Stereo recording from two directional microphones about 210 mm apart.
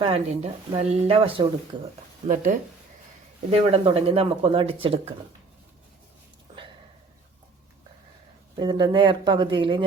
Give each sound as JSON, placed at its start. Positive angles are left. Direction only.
{"t": 0.0, "sound": "speech", "side_deg": -30}
{"t": 2.2, "sound": "speech", "side_deg": -40}
{"t": 8.5, "sound": "speech", "side_deg": -20}